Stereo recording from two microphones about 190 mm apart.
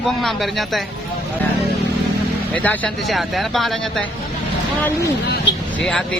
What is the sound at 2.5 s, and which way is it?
Speech, 10° left (ahead or behind).